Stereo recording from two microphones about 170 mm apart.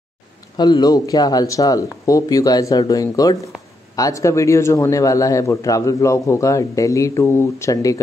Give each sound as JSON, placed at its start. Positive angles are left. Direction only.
{"t": 0.6, "sound": "a man's voice", "side_deg": 25}